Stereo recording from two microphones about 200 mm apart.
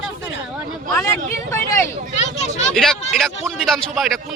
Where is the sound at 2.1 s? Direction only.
35° left (ahead or behind).